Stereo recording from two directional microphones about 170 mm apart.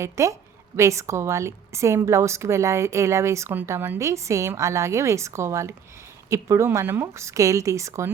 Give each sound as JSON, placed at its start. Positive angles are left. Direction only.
{"t": 0.0, "sound": "a woman's voice", "side_deg": -15}